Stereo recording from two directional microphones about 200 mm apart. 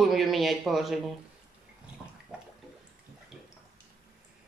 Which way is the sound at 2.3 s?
5° right (ahead or behind).